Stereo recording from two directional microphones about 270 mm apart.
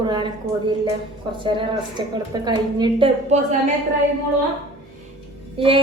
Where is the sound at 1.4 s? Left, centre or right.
Centre.